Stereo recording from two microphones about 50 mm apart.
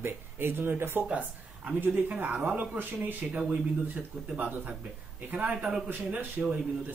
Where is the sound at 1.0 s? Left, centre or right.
Right.